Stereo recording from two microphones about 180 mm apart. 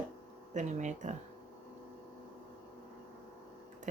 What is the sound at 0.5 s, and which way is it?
Speech, 40° right (ahead or behind).